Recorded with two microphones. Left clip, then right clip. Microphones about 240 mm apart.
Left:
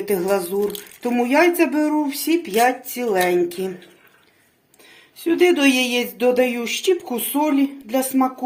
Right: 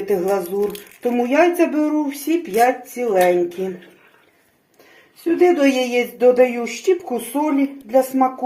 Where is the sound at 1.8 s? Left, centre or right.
Left.